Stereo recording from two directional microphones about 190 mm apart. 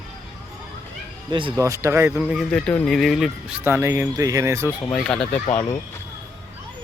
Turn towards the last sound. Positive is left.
turn(degrees=5)  # may be behind; listen again after turning